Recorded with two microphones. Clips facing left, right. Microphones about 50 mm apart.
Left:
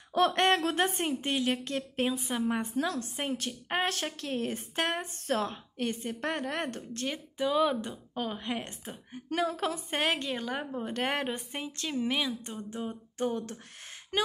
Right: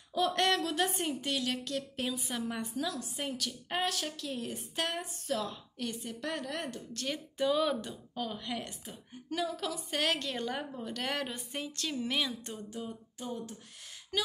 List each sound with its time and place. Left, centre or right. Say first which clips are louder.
0.3 s a woman's voice: left 4 dB; left
7.1 s speech: even; centre
7.8 s a woman's voice: left 3 dB; left
10.3 s speech: left 2 dB; centre
10.7 s a woman's voice: left 5 dB; left
12.1 s speech: left 2 dB; centre
13.2 s a sound: left 8 dB; left
14.1 s speech: left 4 dB; left